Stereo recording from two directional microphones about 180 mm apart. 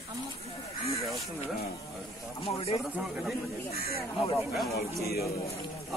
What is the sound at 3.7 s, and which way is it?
Speech, 60° left (ahead or behind).